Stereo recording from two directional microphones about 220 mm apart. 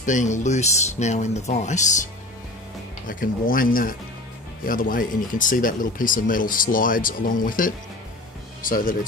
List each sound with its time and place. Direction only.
0.0 s speech: 35° left (ahead or behind)
3.1 s speech: 40° left (ahead or behind)